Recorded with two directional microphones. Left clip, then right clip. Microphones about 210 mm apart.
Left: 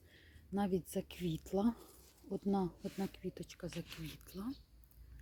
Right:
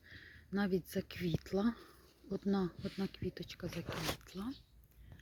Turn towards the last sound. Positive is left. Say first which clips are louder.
# right 7 dB
turn(degrees=0)  # may be behind; listen again after turning